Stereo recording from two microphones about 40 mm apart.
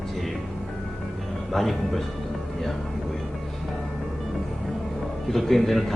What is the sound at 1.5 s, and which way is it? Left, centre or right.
Speech, centre.